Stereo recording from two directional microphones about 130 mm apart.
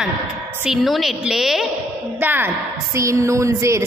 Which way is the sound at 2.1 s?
15° right (ahead or behind).